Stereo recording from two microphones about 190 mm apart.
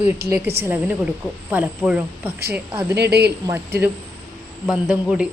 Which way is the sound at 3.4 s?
10° right (ahead or behind).